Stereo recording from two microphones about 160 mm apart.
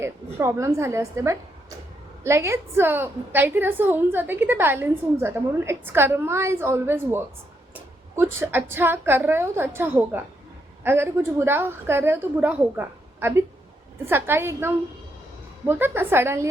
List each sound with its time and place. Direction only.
0.0 s a woman's voice: 15° right (ahead or behind)